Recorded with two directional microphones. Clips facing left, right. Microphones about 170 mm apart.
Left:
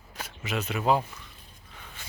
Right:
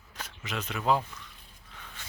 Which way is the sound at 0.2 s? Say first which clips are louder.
Left 4 dB; 10° left (ahead or behind).